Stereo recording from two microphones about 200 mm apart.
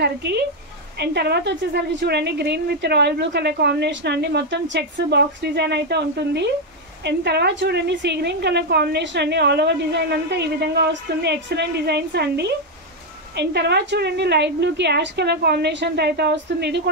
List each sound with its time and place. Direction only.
0.0 s a woman's voice: 55° right (ahead or behind)